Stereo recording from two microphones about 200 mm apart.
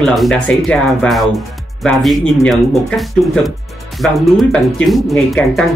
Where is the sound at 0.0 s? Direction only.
Centre (ahead or behind).